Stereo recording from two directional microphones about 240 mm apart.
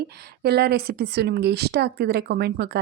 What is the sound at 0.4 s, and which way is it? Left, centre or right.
Speech, right.